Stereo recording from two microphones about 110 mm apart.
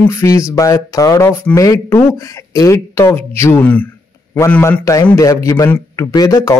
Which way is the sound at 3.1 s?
20° left (ahead or behind).